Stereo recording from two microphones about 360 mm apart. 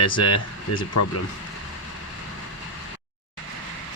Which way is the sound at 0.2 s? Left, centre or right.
Left.